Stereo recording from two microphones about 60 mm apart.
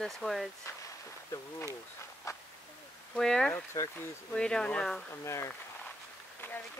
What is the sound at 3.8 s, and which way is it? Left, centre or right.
Speech, left.